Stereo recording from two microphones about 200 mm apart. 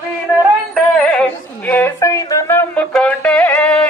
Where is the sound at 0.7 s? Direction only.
5° left (ahead or behind).